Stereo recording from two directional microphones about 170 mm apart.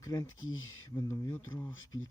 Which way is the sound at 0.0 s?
20° left (ahead or behind).